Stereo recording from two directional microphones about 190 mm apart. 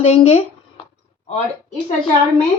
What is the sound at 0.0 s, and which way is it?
Speech, 30° left (ahead or behind).